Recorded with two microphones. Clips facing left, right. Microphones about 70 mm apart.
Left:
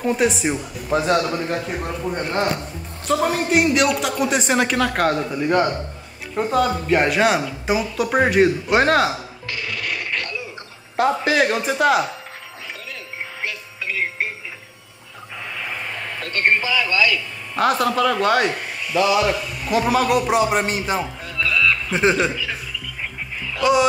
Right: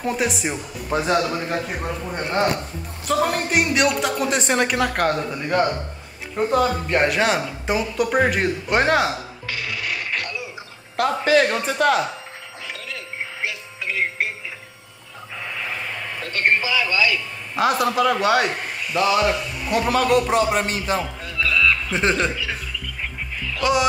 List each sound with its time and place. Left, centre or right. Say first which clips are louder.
0.0 s a man's voice: left 4 dB; centre
9.7 s dog: left 1 dB; centre
11.2 s speech: right 1 dB; centre
13.4 s radio: even; centre
15.4 s a sound: even; centre
16.2 s a sound: left 2 dB; centre
16.4 s a man's voice: left 1 dB; centre
16.9 s a man's voice: left 2 dB; centre
17.6 s a man's voice: left 1 dB; centre
21.4 s a sound: even; centre
22.3 s a man's voice: left 1 dB; centre
23.6 s a man's voice: left 3 dB; centre